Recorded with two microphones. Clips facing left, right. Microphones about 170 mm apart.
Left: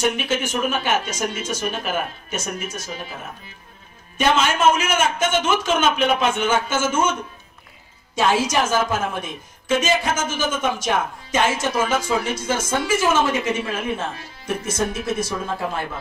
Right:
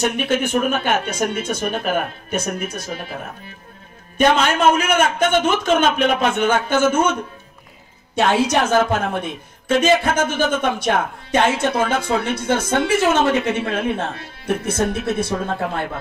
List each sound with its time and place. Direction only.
0.3 s speech: 60° right (ahead or behind)
4.2 s speech: 55° right (ahead or behind)
8.2 s speech: 60° right (ahead or behind)